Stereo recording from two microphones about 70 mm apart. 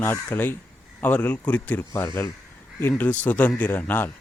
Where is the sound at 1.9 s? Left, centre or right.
Left.